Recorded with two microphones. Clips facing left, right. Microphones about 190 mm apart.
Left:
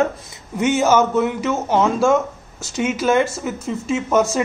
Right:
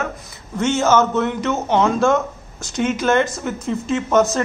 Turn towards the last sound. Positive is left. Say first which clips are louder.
# right 1 dB
turn(degrees=10)  # may be behind; listen again after turning